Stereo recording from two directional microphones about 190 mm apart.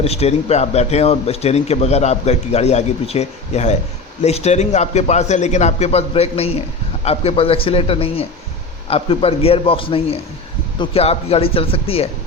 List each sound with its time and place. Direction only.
0.0 s speech: 30° left (ahead or behind)